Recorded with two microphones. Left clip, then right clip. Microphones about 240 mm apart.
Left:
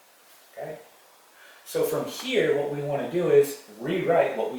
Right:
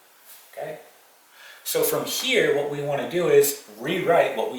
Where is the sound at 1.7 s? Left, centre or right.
Centre.